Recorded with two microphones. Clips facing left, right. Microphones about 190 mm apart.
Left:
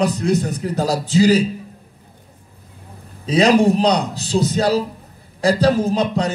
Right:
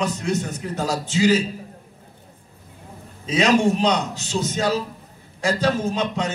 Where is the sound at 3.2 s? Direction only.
35° left (ahead or behind).